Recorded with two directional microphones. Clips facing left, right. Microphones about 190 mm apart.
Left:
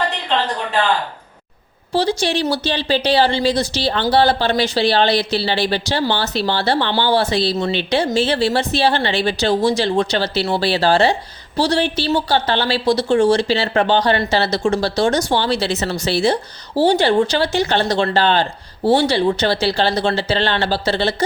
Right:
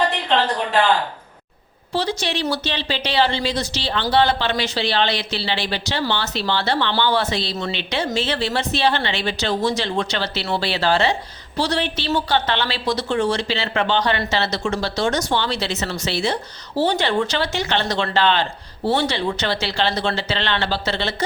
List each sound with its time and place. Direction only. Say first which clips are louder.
1.9 s speech: left 5 dB; 35° left (ahead or behind)